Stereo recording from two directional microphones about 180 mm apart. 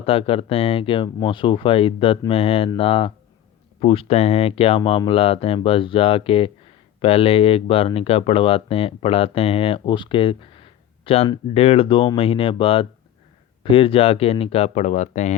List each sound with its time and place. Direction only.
0.0 s speech: 30° left (ahead or behind)